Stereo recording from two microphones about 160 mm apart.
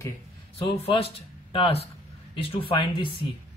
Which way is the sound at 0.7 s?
35° left (ahead or behind).